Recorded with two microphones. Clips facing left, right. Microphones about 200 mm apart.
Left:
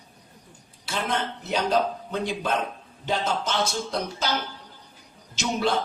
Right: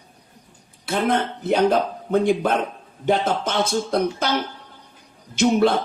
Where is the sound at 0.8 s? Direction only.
55° right (ahead or behind).